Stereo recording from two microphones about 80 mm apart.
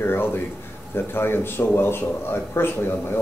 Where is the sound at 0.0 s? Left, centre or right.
Left.